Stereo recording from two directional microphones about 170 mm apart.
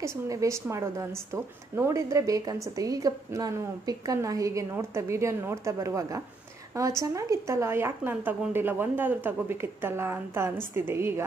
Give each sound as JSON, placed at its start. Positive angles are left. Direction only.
{"t": 0.0, "sound": "a woman's voice", "side_deg": -20}